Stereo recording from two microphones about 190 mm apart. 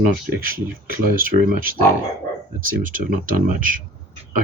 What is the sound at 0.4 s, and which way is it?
Speech, 50° right (ahead or behind).